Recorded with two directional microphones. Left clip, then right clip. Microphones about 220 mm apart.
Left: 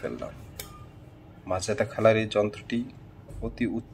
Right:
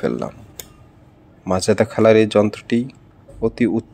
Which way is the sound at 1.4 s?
40° right (ahead or behind).